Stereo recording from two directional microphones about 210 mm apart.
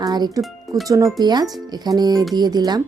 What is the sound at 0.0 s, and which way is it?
Speech, 20° right (ahead or behind).